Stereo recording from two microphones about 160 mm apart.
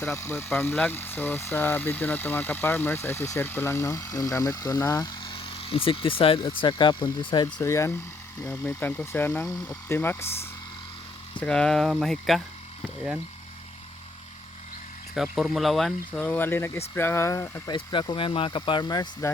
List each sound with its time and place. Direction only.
0.0 s speech: 15° left (ahead or behind)
11.3 s speech: 5° left (ahead or behind)
15.1 s speech: centre (ahead or behind); by 17.7 s 20° left (ahead or behind)
17.7 s speech: 30° left (ahead or behind)